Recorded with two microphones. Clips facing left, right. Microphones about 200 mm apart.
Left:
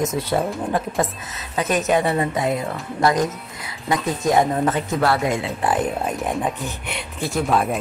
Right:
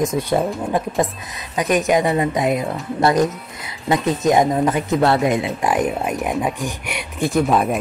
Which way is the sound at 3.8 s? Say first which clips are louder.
Right 4 dB; 20° right (ahead or behind).